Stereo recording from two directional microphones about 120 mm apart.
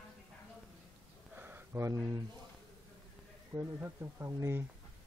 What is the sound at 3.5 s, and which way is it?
Speech, 25° right (ahead or behind).